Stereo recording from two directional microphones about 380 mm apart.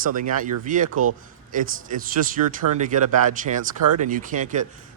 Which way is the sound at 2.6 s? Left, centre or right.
Right.